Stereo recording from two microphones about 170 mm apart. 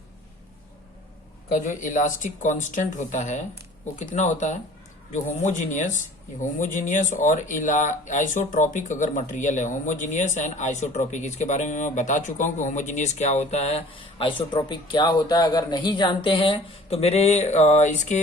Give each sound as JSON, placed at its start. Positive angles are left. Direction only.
{"t": 1.5, "sound": "speech", "side_deg": 50}